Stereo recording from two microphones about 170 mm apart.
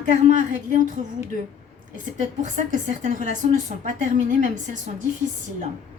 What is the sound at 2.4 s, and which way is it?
A woman's voice, 45° right (ahead or behind).